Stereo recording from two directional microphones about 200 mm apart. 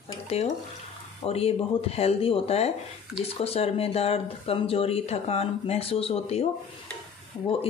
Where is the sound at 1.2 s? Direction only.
30° left (ahead or behind).